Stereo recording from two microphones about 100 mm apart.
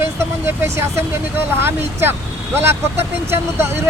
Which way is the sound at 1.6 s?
25° right (ahead or behind).